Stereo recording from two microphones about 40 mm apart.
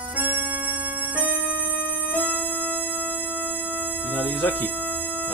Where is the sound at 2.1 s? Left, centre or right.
Left.